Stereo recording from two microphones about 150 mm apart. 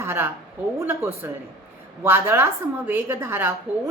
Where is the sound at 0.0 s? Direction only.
15° right (ahead or behind).